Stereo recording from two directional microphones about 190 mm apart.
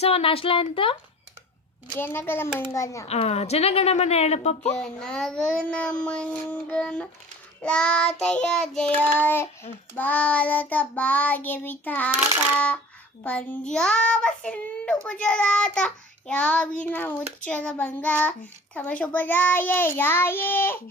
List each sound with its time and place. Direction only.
0.0 s speech: 30° left (ahead or behind)
2.0 s a child's voice: 10° left (ahead or behind)
3.1 s a woman's voice: 35° left (ahead or behind)
4.8 s a child's voice: 5° left (ahead or behind)